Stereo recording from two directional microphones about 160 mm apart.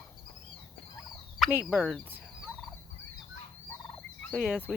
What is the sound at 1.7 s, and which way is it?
Speech, 5° right (ahead or behind).